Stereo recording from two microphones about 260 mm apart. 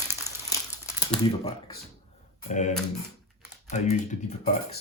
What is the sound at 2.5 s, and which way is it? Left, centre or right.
Speech, left.